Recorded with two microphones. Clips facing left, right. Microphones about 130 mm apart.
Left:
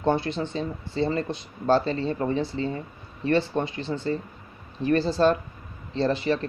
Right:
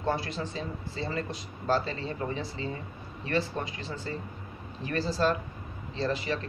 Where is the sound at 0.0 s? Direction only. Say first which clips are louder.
Left 6 dB; 25° left (ahead or behind).